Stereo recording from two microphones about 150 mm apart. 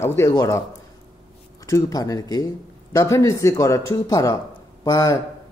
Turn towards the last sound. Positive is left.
turn(degrees=25)  # may be behind; listen again after turning